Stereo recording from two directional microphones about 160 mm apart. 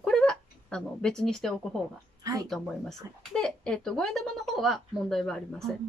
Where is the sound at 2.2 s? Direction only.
20° right (ahead or behind).